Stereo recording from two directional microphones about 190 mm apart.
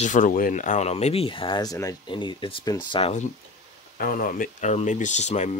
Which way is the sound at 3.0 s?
30° left (ahead or behind).